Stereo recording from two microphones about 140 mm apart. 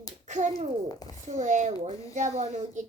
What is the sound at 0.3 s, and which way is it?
A child's voice, 55° right (ahead or behind).